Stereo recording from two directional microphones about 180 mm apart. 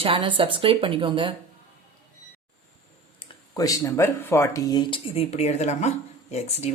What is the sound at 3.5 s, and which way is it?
Speech, 20° left (ahead or behind).